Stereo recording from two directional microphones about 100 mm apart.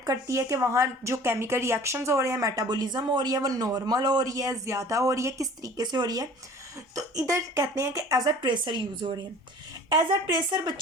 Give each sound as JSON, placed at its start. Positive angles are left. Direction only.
{"t": 0.0, "sound": "a woman's voice", "side_deg": -35}